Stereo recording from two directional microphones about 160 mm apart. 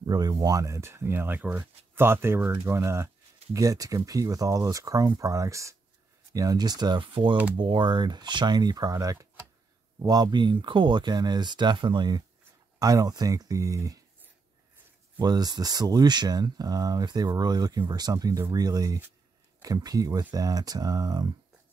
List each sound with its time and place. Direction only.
0.0 s speech: 25° right (ahead or behind)
15.1 s speech: 25° right (ahead or behind)